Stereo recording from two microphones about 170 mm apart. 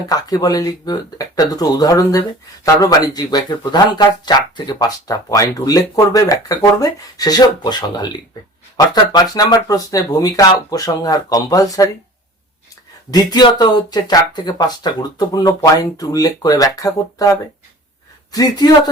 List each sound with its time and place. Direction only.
0.1 s speech: 20° left (ahead or behind)
13.1 s a man's voice: 25° left (ahead or behind)